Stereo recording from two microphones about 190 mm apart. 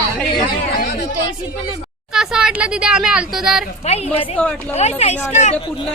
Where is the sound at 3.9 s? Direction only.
35° left (ahead or behind).